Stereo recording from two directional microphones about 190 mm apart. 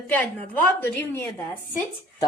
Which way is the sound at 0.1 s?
10° left (ahead or behind).